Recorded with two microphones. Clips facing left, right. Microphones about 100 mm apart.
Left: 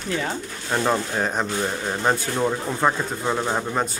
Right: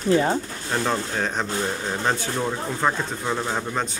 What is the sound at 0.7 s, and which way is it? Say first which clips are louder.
Speech: left 3 dB; 10° left (ahead or behind).